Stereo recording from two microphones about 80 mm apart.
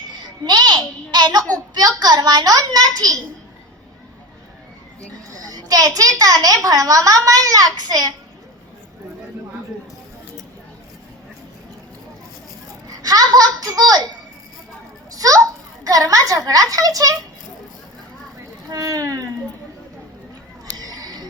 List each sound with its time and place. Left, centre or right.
0.4 s a child's voice: right
5.3 s a woman's voice: right
13.0 s a woman's voice: right
15.1 s a sound: right
15.8 s a woman's voice: right
18.7 s a woman's voice: right
20.7 s a sound: right